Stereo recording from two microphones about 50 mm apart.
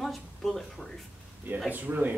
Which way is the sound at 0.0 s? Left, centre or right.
Centre.